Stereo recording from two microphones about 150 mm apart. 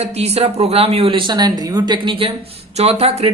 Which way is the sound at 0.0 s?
45° right (ahead or behind).